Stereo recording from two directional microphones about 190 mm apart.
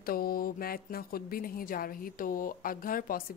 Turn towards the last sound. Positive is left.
turn(degrees=45)  # may be behind; listen again after turning